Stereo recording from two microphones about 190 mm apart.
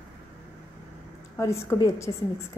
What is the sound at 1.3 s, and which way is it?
Speech, 15° left (ahead or behind).